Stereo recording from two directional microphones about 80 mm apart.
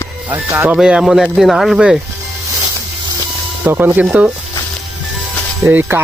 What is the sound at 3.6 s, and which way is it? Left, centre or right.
Speech, right.